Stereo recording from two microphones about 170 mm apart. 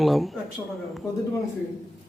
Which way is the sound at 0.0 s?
Centre (ahead or behind).